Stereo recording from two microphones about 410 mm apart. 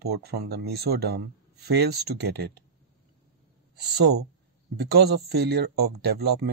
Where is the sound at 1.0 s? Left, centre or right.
Right.